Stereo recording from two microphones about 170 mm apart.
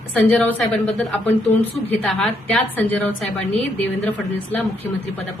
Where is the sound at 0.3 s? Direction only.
5° left (ahead or behind).